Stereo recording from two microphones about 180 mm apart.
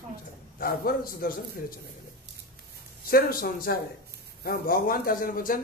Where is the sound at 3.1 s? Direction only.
55° left (ahead or behind).